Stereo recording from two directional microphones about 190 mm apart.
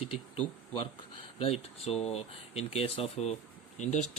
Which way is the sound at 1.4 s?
30° left (ahead or behind).